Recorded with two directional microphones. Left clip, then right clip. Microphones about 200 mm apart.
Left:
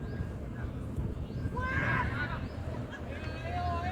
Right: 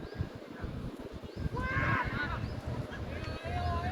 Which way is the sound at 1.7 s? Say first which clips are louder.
Even; 20° left (ahead or behind).